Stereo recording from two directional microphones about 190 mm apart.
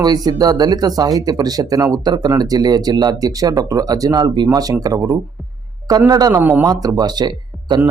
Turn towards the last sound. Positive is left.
turn(degrees=-20)  # may be behind; listen again after turning